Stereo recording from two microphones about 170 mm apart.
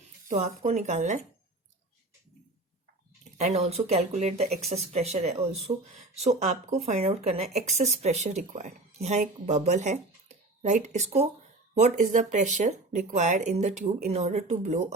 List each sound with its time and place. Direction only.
0.3 s speech: 40° right (ahead or behind)
3.3 s speech: 40° right (ahead or behind)